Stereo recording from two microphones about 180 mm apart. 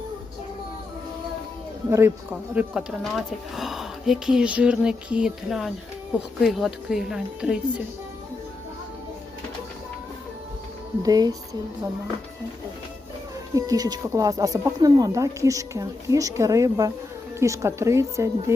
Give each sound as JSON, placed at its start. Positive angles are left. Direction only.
{"t": 1.9, "sound": "a woman's voice", "side_deg": -15}
{"t": 2.6, "sound": "speech", "side_deg": -5}
{"t": 11.0, "sound": "speech", "side_deg": -20}
{"t": 13.5, "sound": "a woman's voice", "side_deg": -20}